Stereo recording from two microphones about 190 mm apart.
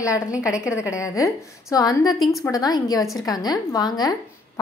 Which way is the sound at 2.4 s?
20° left (ahead or behind).